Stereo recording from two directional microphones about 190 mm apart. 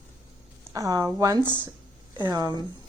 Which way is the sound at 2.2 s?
20° right (ahead or behind).